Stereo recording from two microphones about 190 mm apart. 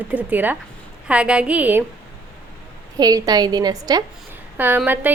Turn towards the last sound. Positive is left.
turn(degrees=-10)  # may be behind; listen again after turning